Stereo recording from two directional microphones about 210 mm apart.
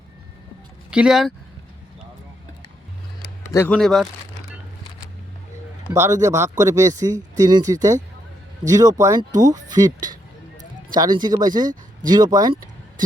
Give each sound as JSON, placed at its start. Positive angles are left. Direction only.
{"t": 0.9, "sound": "speech", "side_deg": -5}
{"t": 3.4, "sound": "speech", "side_deg": 10}
{"t": 5.9, "sound": "speech", "side_deg": -15}